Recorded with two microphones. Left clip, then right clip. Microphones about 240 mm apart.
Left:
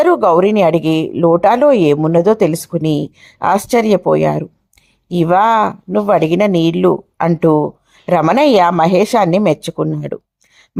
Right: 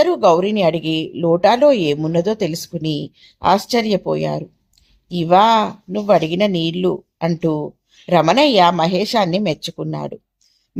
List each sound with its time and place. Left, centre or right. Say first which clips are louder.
0.0 s speech: left 3 dB; left